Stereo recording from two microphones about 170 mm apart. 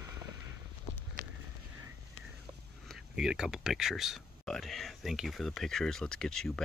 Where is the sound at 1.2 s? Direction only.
55° right (ahead or behind).